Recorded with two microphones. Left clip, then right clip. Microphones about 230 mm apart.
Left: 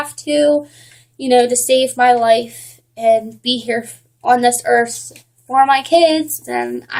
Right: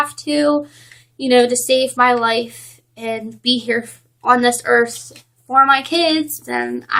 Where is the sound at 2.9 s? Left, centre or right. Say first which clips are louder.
Left 11 dB; centre.